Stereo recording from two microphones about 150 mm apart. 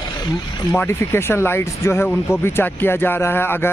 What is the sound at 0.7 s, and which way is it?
Speech, 15° left (ahead or behind).